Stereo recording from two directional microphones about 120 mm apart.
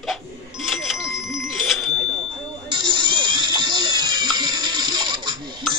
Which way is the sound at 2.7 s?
40° right (ahead or behind).